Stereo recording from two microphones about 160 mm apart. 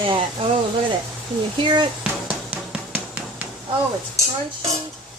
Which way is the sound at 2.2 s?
10° right (ahead or behind).